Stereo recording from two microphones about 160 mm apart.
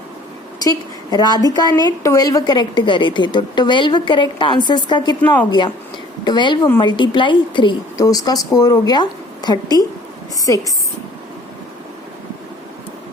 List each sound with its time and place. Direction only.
0.6 s a woman's voice: 25° left (ahead or behind)